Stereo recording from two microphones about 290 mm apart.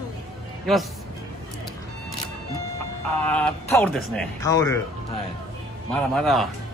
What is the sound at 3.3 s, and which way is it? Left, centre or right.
Speech, centre.